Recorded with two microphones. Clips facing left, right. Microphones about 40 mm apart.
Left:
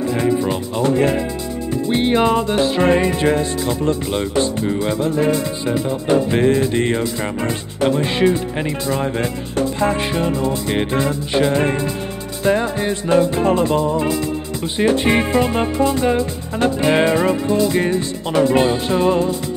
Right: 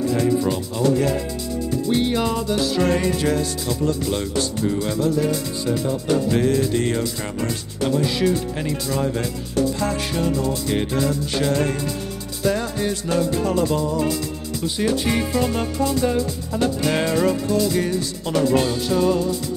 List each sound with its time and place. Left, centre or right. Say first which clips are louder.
0.1 s speech: left 3 dB; left
1.9 s music: left 6 dB; left
8.8 s speech: left 3 dB; left
12.4 s music: left 4 dB; left
14.8 s speech: left 6 dB; left